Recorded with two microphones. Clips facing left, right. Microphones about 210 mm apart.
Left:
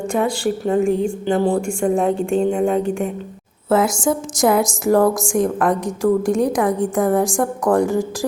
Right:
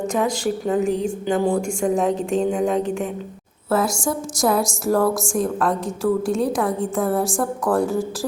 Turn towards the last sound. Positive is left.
turn(degrees=15)  # may be behind; listen again after turning